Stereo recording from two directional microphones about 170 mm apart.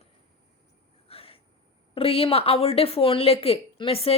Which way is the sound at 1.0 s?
35° left (ahead or behind).